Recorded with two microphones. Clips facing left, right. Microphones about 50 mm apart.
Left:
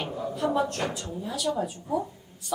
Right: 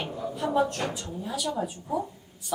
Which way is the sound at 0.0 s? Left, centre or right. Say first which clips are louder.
Left 2 dB; centre.